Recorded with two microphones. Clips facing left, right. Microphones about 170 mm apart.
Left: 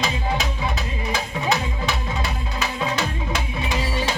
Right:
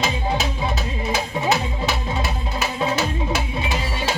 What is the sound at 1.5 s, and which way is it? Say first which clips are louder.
Music: even; 5° right (ahead or behind).